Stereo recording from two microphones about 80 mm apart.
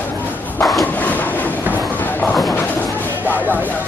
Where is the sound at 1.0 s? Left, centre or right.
Left.